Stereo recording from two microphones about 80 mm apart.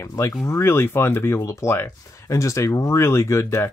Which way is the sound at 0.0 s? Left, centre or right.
Left.